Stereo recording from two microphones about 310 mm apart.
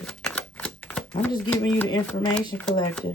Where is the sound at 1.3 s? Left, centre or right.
Centre.